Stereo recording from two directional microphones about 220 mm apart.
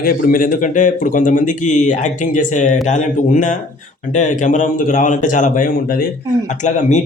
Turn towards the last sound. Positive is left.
turn(degrees=35)  # may be behind; listen again after turning